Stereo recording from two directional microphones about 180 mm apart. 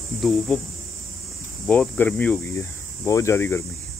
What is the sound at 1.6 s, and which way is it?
Speech, 5° left (ahead or behind).